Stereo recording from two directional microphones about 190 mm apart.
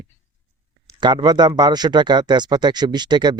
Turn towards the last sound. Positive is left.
turn(degrees=-25)  # may be behind; listen again after turning